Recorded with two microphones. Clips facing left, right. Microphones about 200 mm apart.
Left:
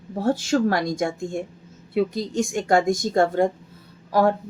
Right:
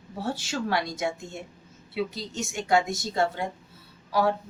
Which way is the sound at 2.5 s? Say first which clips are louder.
Left 4 dB; 50° left (ahead or behind).